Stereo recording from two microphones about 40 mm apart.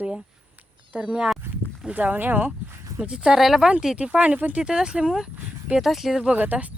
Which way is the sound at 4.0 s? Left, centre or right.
Right.